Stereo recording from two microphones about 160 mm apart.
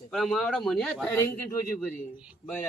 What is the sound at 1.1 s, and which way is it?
Speech, 15° left (ahead or behind).